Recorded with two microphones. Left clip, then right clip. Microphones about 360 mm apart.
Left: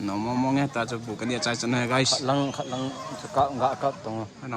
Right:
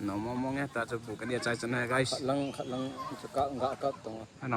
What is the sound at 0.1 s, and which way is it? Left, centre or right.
Speech, left.